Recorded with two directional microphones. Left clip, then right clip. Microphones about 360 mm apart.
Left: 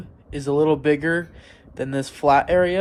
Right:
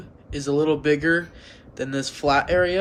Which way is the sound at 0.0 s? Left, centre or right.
Centre.